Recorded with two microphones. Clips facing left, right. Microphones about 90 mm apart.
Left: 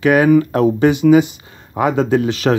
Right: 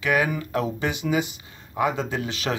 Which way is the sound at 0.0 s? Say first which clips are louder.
Left 12 dB; 50° left (ahead or behind).